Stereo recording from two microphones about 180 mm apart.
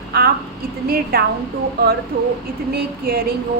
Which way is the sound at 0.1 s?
60° right (ahead or behind).